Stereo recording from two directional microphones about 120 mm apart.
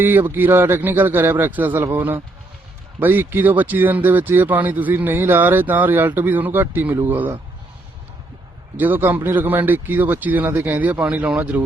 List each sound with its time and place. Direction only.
0.0 s speech: 15° right (ahead or behind)
8.8 s speech: 15° right (ahead or behind)